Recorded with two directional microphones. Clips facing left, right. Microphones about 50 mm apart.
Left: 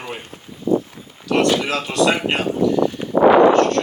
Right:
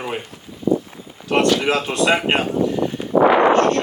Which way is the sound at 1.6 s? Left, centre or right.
Right.